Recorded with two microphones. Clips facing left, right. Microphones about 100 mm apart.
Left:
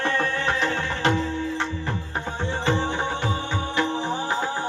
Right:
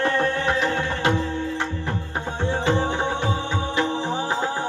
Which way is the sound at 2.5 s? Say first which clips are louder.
Right 2 dB; 15° right (ahead or behind).